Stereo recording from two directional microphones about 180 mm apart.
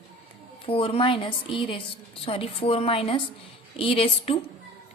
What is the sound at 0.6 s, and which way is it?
A woman's voice, 30° left (ahead or behind).